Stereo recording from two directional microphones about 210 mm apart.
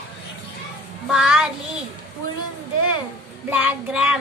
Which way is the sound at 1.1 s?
5° right (ahead or behind).